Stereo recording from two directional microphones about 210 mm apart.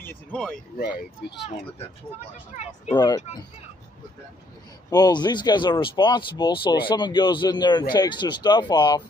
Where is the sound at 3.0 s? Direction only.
20° left (ahead or behind).